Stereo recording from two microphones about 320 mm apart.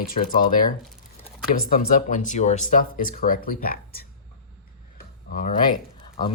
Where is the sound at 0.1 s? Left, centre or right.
Left.